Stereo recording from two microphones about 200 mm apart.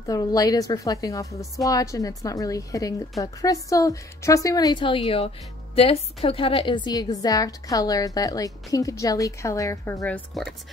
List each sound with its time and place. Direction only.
0.0 s a woman's voice: 20° left (ahead or behind)